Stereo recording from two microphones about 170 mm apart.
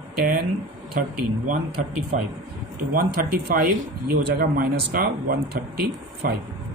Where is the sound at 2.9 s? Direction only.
60° right (ahead or behind).